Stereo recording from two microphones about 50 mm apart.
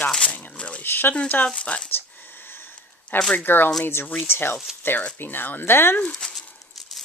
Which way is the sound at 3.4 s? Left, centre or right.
Left.